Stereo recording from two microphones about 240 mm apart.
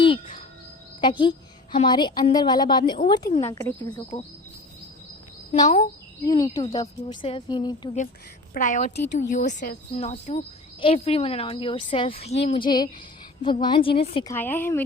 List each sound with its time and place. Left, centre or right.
0.0 s a sound: left
1.0 s a woman's voice: centre
5.6 s speech: left
6.2 s a woman's voice: centre
8.5 s speech: left
14.3 s a woman's voice: centre